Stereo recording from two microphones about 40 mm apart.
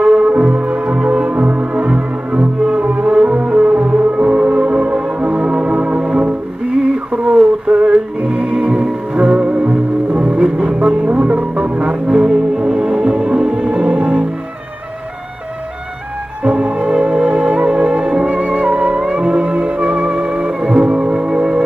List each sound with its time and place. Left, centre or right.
0.0 s music: right
2.8 s music: right
9.7 s music: right
11.8 s music: right
16.4 s music: right
21.0 s music: centre